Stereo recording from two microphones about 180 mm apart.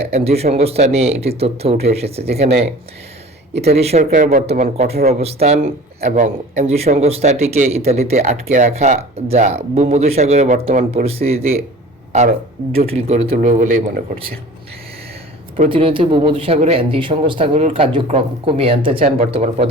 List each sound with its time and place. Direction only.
0.0 s speech: 35° right (ahead or behind)
2.3 s speech: 60° right (ahead or behind)
3.6 s speech: 35° right (ahead or behind)
4.4 s speech: 40° right (ahead or behind)
12.7 s speech: 35° right (ahead or behind)
15.5 s speech: 35° right (ahead or behind)